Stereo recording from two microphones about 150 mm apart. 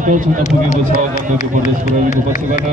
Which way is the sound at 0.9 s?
55° left (ahead or behind).